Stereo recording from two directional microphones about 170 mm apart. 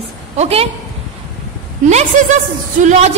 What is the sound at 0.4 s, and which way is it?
Speech, 35° right (ahead or behind).